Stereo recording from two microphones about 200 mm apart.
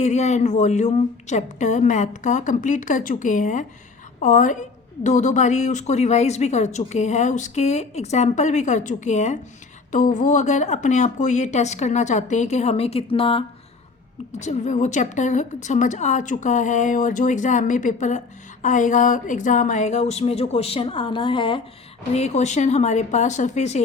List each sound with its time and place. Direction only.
0.0 s speech: 35° left (ahead or behind)